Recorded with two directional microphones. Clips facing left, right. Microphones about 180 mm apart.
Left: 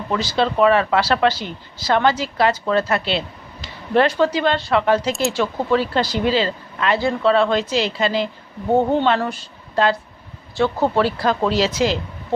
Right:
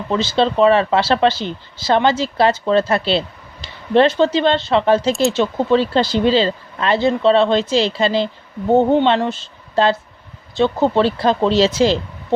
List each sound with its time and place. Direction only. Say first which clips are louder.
0.1 s speech: right 3 dB; 25° right (ahead or behind)